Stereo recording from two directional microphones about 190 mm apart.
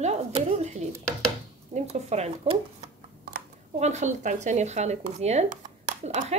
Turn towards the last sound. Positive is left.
turn(degrees=-40)  # may be behind; listen again after turning